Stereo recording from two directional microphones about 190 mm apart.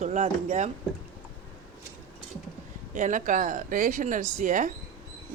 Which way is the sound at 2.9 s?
40° right (ahead or behind).